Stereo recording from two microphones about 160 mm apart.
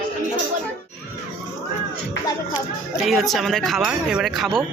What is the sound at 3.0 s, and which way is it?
Speech, centre (ahead or behind).